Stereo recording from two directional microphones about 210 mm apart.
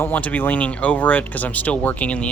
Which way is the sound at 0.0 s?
5° left (ahead or behind).